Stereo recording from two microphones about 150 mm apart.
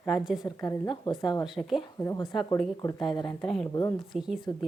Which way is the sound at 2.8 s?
25° left (ahead or behind).